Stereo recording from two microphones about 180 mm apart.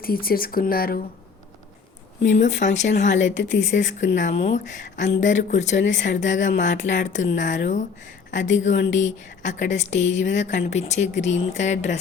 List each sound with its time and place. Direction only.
0.0 s speech: 55° left (ahead or behind)
2.4 s speech: 45° left (ahead or behind)
3.2 s a woman's voice: 90° left
4.1 s speech: 40° left (ahead or behind)
8.8 s a woman's voice: 90° left
9.4 s speech: 45° left (ahead or behind)